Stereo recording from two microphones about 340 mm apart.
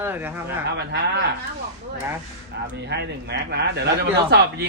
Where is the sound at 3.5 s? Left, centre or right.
Right.